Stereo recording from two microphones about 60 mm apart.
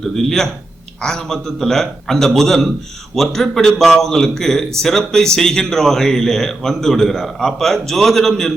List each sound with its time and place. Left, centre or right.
0.0 s a man's voice: centre